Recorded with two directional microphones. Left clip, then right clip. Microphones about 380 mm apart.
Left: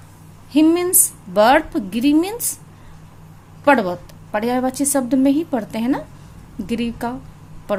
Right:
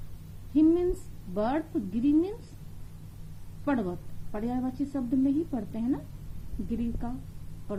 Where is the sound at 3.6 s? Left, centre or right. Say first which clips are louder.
Left 16 dB; left.